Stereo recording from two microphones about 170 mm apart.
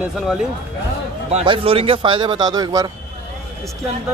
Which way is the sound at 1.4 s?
30° right (ahead or behind).